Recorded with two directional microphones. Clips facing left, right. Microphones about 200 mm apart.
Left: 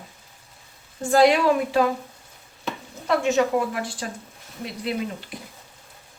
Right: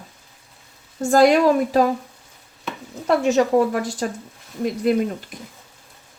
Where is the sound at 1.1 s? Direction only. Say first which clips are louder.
Right 3 dB; 45° right (ahead or behind).